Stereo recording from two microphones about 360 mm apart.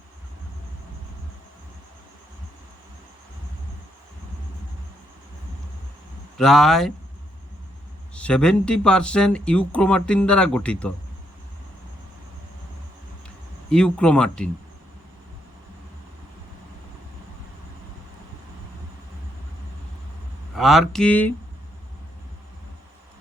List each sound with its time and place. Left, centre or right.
6.3 s speech: centre
8.1 s speech: centre
13.2 s speech: centre
20.6 s speech: centre